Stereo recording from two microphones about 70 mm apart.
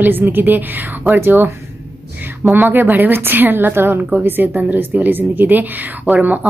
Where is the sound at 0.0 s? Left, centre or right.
Right.